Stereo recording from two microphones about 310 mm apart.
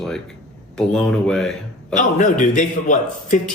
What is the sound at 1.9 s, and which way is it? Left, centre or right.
A man's voice, left.